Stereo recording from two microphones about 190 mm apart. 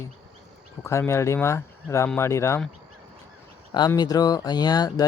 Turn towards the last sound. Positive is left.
turn(degrees=20)  # may be behind; listen again after turning